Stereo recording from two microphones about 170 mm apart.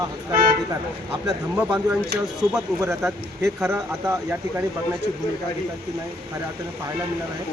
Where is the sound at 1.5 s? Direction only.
5° right (ahead or behind).